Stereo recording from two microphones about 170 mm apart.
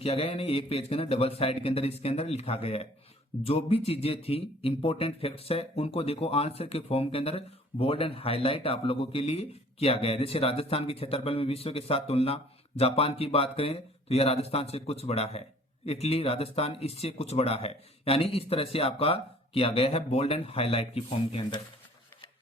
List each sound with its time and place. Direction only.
0.0 s speech: 35° left (ahead or behind)